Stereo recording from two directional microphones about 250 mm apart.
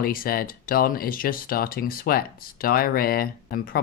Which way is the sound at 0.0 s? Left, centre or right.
Left.